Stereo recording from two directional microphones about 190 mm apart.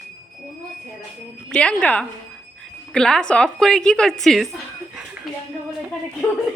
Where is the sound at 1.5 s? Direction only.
5° left (ahead or behind).